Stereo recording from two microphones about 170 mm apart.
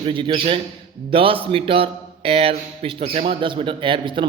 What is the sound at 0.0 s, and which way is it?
A man's voice, 30° right (ahead or behind).